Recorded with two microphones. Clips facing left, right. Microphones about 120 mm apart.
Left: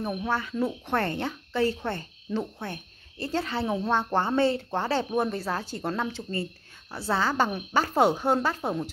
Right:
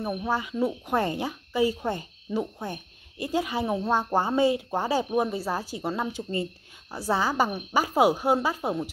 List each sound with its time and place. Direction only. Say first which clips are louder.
0.0 s speech: right 1 dB; 10° right (ahead or behind)
6.0 s speech: right 2 dB; 15° right (ahead or behind)